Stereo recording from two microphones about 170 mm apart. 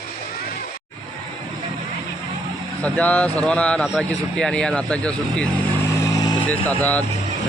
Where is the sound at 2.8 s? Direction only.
10° left (ahead or behind).